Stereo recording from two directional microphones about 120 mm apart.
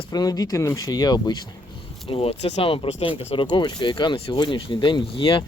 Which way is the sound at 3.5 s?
40° left (ahead or behind).